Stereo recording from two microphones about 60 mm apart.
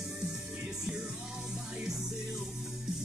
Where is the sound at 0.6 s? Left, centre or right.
Centre.